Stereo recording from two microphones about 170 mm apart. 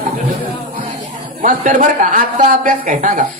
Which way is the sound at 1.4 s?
50° right (ahead or behind).